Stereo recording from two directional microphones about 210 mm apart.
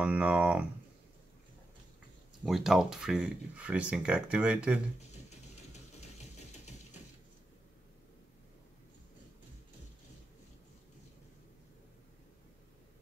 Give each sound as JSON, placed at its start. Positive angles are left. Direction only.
{"t": 0.0, "sound": "speech", "side_deg": -5}
{"t": 2.4, "sound": "speech", "side_deg": 0}
{"t": 5.3, "sound": "ratchet", "side_deg": 30}